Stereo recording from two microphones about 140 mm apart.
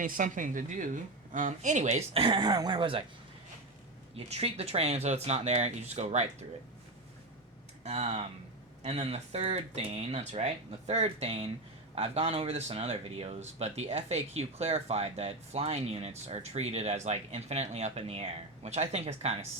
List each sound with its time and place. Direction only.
0.0 s a woman's voice: 70° right (ahead or behind); by 3.0 s 35° right (ahead or behind)
4.1 s speech: 45° right (ahead or behind)
7.9 s speech: 50° right (ahead or behind)